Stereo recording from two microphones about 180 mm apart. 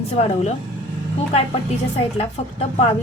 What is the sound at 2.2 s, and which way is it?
Speech, 35° left (ahead or behind).